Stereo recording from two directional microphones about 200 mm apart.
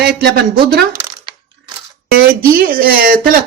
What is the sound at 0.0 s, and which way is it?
Speech, 55° right (ahead or behind).